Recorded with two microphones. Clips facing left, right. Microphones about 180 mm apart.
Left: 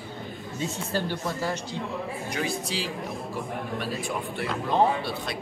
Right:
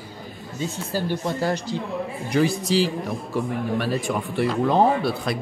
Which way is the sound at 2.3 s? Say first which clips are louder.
Right 12 dB; centre (ahead or behind).